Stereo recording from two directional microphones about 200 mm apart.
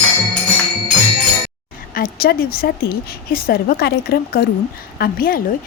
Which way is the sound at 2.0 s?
50° left (ahead or behind).